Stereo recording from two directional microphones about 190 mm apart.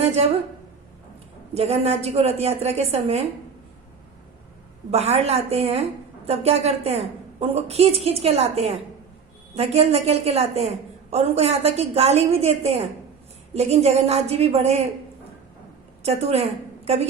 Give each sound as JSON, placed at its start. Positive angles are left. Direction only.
{"t": 0.0, "sound": "a sound", "side_deg": -35}
{"t": 1.5, "sound": "a woman's voice", "side_deg": -35}
{"t": 4.9, "sound": "a woman's voice", "side_deg": -35}
{"t": 16.0, "sound": "a woman's voice", "side_deg": -35}